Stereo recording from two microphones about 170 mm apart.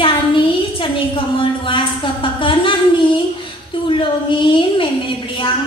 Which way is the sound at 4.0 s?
30° left (ahead or behind).